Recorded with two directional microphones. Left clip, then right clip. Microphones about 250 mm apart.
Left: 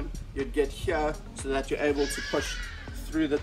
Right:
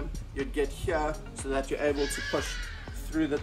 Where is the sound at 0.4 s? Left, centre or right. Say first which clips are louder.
Left 3 dB; centre.